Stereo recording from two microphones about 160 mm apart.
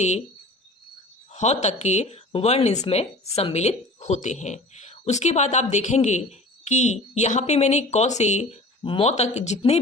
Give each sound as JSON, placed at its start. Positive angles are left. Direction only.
{"t": 1.3, "sound": "speech", "side_deg": 45}